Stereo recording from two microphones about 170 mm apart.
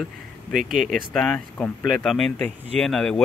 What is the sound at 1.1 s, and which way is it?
Speech, 5° left (ahead or behind).